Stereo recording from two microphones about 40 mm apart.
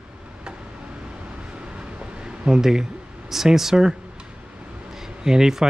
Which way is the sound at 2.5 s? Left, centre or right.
Centre.